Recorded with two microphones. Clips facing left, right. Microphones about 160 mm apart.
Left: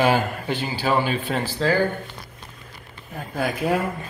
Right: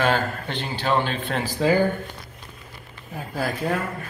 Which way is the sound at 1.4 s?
15° right (ahead or behind).